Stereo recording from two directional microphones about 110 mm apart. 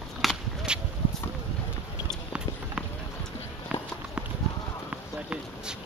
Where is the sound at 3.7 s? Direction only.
10° right (ahead or behind).